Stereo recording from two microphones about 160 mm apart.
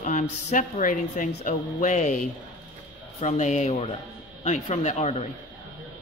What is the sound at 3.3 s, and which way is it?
Speech, 45° left (ahead or behind).